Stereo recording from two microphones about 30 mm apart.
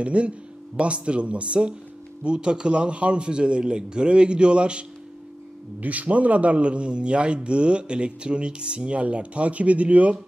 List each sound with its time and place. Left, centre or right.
0.0 s a man's voice: right
5.8 s a man's voice: right